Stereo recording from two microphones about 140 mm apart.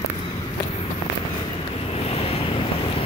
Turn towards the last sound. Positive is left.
turn(degrees=40)  # may be behind; listen again after turning